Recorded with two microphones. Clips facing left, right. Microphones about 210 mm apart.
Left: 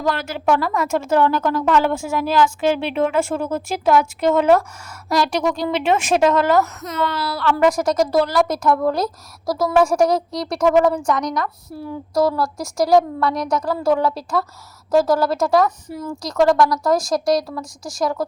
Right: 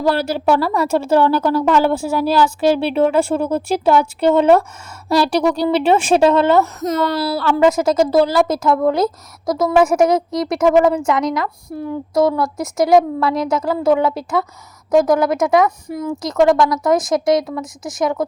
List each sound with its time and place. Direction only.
0.0 s speech: 35° right (ahead or behind)
6.8 s a woman's voice: 40° right (ahead or behind); by 18.3 s 20° right (ahead or behind)